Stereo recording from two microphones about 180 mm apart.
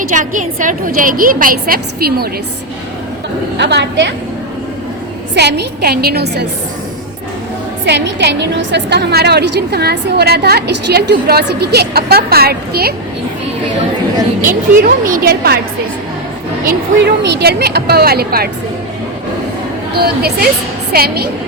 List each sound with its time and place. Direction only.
0.1 s a woman's voice: 45° right (ahead or behind)
3.6 s a woman's voice: 70° right (ahead or behind)
5.3 s a woman's voice: 70° right (ahead or behind)
7.9 s a woman's voice: 75° right (ahead or behind)
14.4 s a woman's voice: 50° right (ahead or behind)
17.2 s a woman's voice: 65° right (ahead or behind)
20.0 s a woman's voice: 60° right (ahead or behind)